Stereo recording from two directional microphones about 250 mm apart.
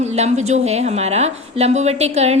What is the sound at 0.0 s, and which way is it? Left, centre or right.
A woman's voice, right.